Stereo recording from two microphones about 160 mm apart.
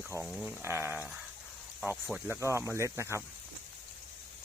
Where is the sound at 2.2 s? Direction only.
15° right (ahead or behind).